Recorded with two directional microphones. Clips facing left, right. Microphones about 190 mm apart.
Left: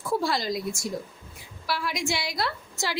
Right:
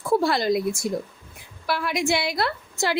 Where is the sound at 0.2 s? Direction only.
60° right (ahead or behind).